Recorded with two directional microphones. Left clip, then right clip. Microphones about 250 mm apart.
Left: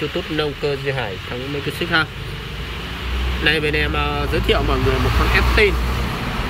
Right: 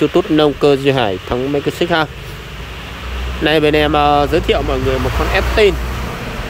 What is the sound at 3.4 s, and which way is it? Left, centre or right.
Speech, right.